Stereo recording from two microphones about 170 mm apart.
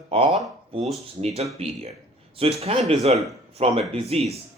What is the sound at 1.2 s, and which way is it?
Speech, 35° right (ahead or behind).